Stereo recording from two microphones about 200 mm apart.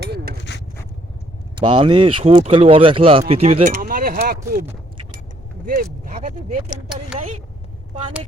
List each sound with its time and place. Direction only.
0.5 s a sound: 60° left (ahead or behind)
1.5 s speech: 25° right (ahead or behind); by 4.6 s 45° right (ahead or behind)
6.1 s speech: 35° right (ahead or behind)